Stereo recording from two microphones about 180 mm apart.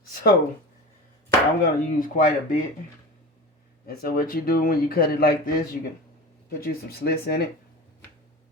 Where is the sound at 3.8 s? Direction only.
55° left (ahead or behind).